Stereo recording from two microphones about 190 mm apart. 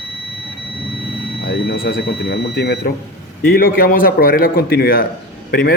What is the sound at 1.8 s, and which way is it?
A man's voice, 60° left (ahead or behind).